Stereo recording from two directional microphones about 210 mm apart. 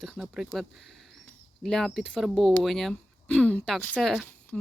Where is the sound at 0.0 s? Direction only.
Centre (ahead or behind).